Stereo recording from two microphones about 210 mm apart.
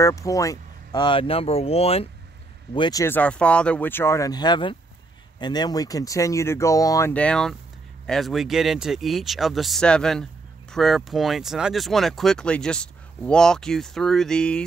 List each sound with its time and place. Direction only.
0.0 s speech: 15° left (ahead or behind)